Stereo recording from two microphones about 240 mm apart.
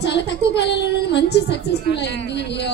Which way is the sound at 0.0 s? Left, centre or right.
Left.